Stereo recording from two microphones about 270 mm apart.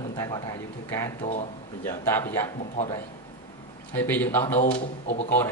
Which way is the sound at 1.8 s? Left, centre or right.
Centre.